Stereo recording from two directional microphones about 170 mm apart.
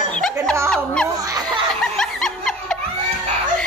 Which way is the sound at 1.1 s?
20° right (ahead or behind).